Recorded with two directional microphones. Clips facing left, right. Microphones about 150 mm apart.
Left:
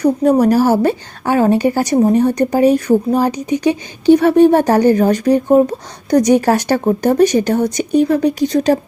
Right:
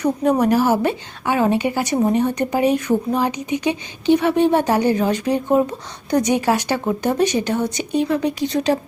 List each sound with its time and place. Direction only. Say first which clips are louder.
0.0 s a woman's voice: left 5 dB; 35° left (ahead or behind)